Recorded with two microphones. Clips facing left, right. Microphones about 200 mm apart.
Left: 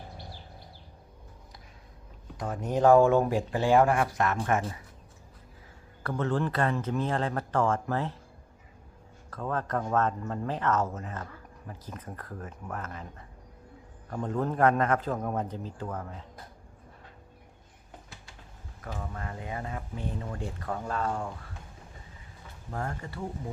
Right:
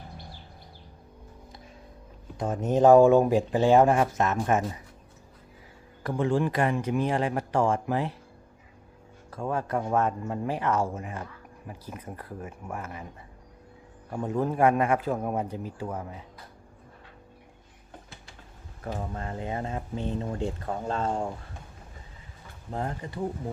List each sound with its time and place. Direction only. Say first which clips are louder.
2.4 s speech: right 4 dB; 25° right (ahead or behind)
6.0 s speech: right 3 dB; 15° right (ahead or behind)
9.3 s speech: right 2 dB; 10° right (ahead or behind)
14.1 s speech: right 2 dB; 10° right (ahead or behind)
18.8 s speech: right 4 dB; 30° right (ahead or behind)
22.7 s speech: right 3 dB; 20° right (ahead or behind)